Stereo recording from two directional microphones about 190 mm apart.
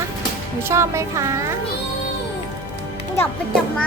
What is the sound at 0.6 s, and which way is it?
Speech, 15° right (ahead or behind).